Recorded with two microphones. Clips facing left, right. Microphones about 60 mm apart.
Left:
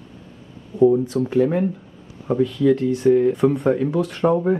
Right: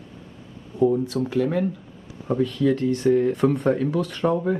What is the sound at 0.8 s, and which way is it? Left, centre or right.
Speech, centre.